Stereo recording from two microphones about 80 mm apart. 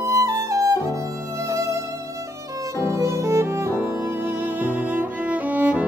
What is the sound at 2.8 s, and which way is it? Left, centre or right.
Violin, right.